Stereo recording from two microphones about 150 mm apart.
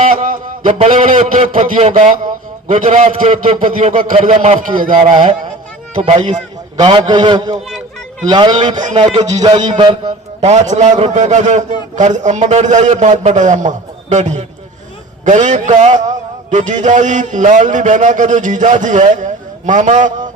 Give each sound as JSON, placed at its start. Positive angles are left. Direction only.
{"t": 0.1, "sound": "a sound", "side_deg": -60}
{"t": 0.9, "sound": "a man's voice", "side_deg": -60}
{"t": 4.3, "sound": "a man's voice", "side_deg": -50}
{"t": 4.8, "sound": "speech", "side_deg": -65}
{"t": 5.0, "sound": "speech", "side_deg": -30}
{"t": 6.0, "sound": "a man's voice", "side_deg": -45}
{"t": 6.7, "sound": "a man's voice", "side_deg": -30}
{"t": 10.4, "sound": "a man's voice", "side_deg": -50}